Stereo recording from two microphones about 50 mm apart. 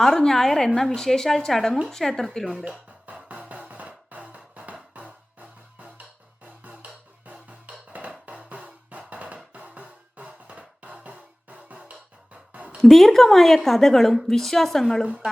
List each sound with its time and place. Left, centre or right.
0.0 s speech: centre
2.4 s speech: centre
3.1 s music: right
11.8 s sigh: right
12.8 s a woman's voice: centre